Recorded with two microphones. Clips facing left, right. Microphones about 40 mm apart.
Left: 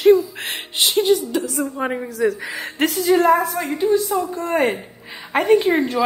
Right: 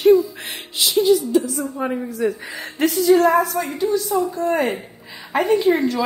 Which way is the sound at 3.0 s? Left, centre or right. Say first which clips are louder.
Right 1 dB; left.